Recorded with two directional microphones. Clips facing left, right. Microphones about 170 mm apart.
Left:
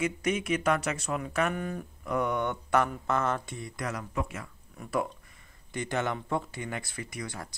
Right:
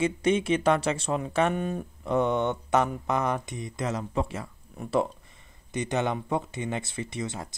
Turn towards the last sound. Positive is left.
turn(degrees=-25)  # may be behind; listen again after turning